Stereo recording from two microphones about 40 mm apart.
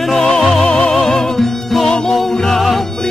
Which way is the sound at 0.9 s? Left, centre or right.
Centre.